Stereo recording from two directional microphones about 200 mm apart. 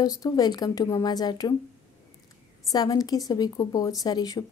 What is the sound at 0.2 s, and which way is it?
Speech, 20° left (ahead or behind).